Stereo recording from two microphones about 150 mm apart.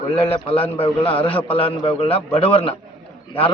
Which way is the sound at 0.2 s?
40° left (ahead or behind).